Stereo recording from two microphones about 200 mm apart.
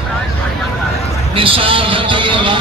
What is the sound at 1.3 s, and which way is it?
A man's voice, 25° right (ahead or behind).